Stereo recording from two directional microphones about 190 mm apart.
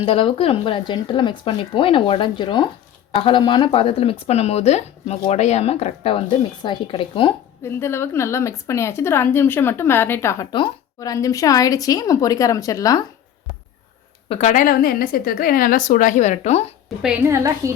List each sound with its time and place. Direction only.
0.0 s speech: 30° left (ahead or behind)
7.6 s a woman's voice: 15° left (ahead or behind)
14.3 s a woman's voice: 35° left (ahead or behind)
17.0 s a woman's voice: 5° right (ahead or behind)